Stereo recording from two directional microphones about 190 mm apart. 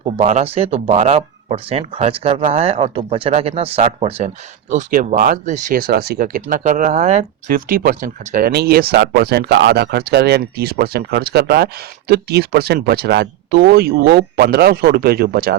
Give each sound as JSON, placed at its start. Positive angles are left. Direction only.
{"t": 0.0, "sound": "speech", "side_deg": -35}
{"t": 4.7, "sound": "speech", "side_deg": -40}